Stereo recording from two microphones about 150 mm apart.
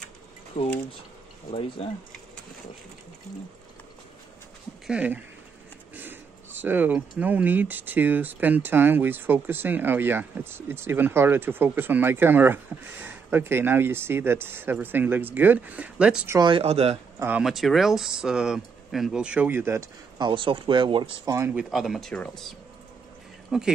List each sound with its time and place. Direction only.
0.5 s speech: 35° left (ahead or behind)
4.8 s speech: 10° right (ahead or behind)
16.3 s speech: 30° right (ahead or behind)
17.4 s speech: centre (ahead or behind)
20.2 s speech: 35° right (ahead or behind)
21.3 s speech: 20° right (ahead or behind)
21.5 s speech: centre (ahead or behind)